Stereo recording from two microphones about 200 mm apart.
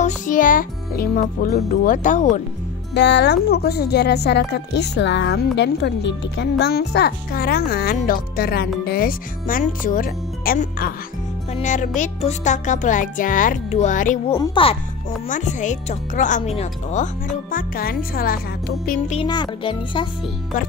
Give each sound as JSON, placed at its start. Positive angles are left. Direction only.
{"t": 0.0, "sound": "speech", "side_deg": 40}
{"t": 2.9, "sound": "speech", "side_deg": 60}
{"t": 14.3, "sound": "a child's voice", "side_deg": 20}
{"t": 15.2, "sound": "speech", "side_deg": 40}
{"t": 18.9, "sound": "speech", "side_deg": 35}
{"t": 19.2, "sound": "a child's voice", "side_deg": 20}